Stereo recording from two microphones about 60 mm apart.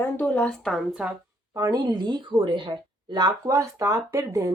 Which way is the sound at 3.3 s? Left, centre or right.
Right.